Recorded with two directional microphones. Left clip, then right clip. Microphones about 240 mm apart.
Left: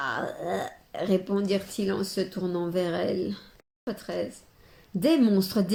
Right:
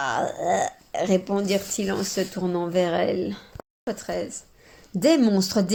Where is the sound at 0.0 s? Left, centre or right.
Right.